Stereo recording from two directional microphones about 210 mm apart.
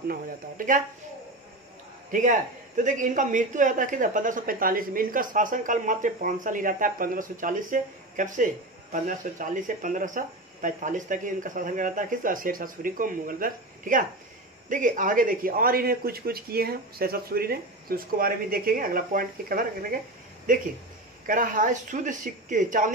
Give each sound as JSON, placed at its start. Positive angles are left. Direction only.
{"t": 0.1, "sound": "a man's voice", "side_deg": -40}
{"t": 2.0, "sound": "a man's voice", "side_deg": -35}
{"t": 21.3, "sound": "a man's voice", "side_deg": -40}